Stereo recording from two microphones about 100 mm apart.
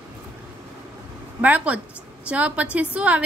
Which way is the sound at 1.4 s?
15° right (ahead or behind).